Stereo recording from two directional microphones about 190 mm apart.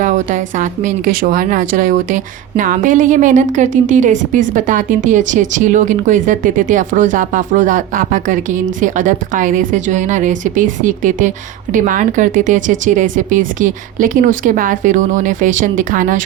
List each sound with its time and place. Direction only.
0.0 s a woman's voice: 45° right (ahead or behind)